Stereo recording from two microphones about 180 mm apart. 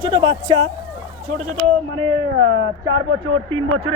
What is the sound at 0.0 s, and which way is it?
Speech, 25° right (ahead or behind).